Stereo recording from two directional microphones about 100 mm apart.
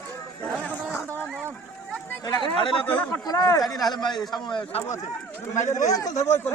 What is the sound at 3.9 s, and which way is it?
Speech, 45° left (ahead or behind).